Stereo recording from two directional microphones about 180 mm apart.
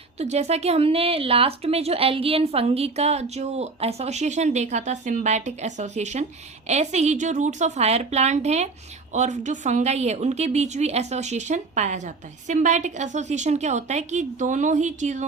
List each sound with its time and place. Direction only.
0.2 s speech: 35° right (ahead or behind)